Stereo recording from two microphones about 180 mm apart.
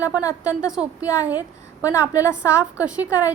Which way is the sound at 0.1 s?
20° left (ahead or behind).